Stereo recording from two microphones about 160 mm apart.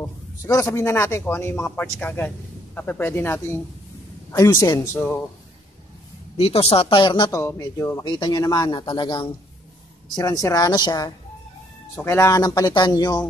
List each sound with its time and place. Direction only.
0.0 s a man's voice: 20° left (ahead or behind)
6.3 s speech: 40° left (ahead or behind)
7.2 s speech: 20° left (ahead or behind)
11.9 s speech: 15° left (ahead or behind)